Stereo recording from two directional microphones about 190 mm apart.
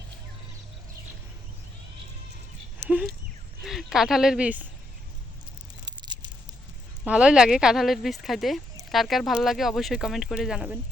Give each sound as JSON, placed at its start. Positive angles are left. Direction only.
{"t": 3.6, "sound": "speech", "side_deg": 0}
{"t": 5.8, "sound": "a sound", "side_deg": -25}
{"t": 7.0, "sound": "speech", "side_deg": -5}